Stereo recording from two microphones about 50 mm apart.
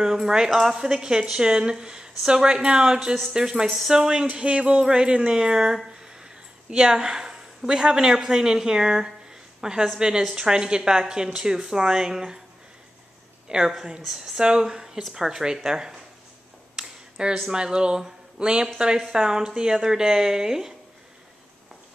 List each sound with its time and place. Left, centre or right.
0.0 s a woman's voice: centre
6.0 s a sound: centre
7.8 s a woman's voice: centre
13.5 s a woman's voice: centre
16.7 s a sound: centre
17.5 s a woman's voice: centre